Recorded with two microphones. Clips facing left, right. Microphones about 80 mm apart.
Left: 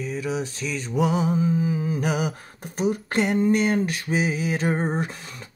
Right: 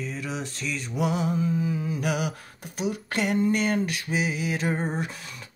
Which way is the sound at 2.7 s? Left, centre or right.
Left.